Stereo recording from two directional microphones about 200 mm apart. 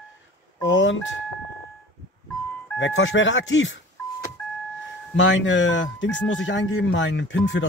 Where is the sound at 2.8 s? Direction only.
70° left (ahead or behind).